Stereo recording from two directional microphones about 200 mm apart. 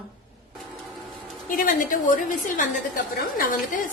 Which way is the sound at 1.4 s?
40° left (ahead or behind).